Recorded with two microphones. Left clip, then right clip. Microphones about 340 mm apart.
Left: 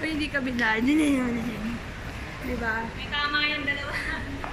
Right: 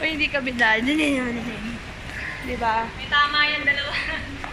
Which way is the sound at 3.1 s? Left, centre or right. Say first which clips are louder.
Right 9 dB; centre.